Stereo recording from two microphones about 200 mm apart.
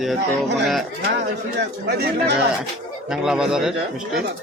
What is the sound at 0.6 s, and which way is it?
Speech, centre (ahead or behind).